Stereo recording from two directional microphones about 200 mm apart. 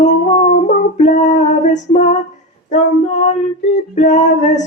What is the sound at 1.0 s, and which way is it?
Music, 35° left (ahead or behind).